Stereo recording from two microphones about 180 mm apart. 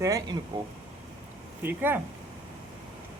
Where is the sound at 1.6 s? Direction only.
10° right (ahead or behind).